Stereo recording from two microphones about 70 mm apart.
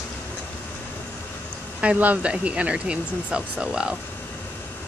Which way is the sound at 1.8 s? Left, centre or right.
Centre.